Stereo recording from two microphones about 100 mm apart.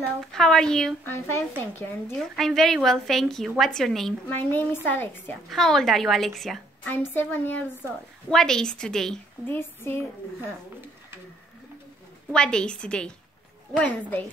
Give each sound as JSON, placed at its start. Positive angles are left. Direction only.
{"t": 0.2, "sound": "a woman's voice", "side_deg": 5}
{"t": 1.0, "sound": "speech", "side_deg": 25}
{"t": 2.1, "sound": "a woman's voice", "side_deg": 5}
{"t": 4.3, "sound": "speech", "side_deg": 20}
{"t": 5.5, "sound": "a woman's voice", "side_deg": 5}
{"t": 6.8, "sound": "speech", "side_deg": 20}
{"t": 8.3, "sound": "a woman's voice", "side_deg": 5}
{"t": 9.5, "sound": "speech", "side_deg": 20}
{"t": 12.3, "sound": "a woman's voice", "side_deg": 10}